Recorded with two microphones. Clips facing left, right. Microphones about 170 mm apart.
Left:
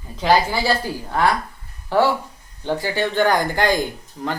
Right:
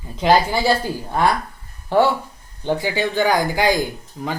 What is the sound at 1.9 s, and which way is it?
Speech, 20° right (ahead or behind).